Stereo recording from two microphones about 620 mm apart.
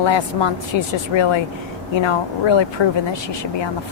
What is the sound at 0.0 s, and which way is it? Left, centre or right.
Speech, left.